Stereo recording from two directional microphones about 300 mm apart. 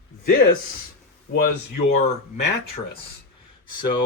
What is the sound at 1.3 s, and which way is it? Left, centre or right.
Speech, left.